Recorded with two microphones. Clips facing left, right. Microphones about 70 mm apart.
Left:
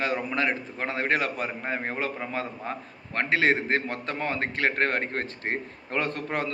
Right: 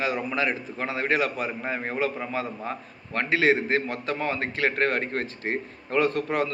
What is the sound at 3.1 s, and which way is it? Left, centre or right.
A man's voice, left.